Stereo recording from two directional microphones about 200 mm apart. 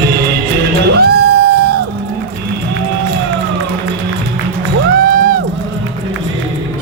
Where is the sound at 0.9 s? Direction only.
55° right (ahead or behind).